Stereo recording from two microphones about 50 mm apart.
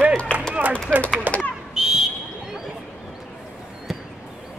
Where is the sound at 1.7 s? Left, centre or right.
Centre.